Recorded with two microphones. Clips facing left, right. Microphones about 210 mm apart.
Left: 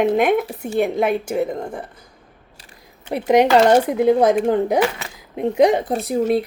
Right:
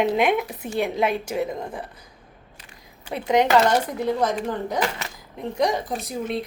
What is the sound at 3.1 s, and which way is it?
Speech, 60° left (ahead or behind).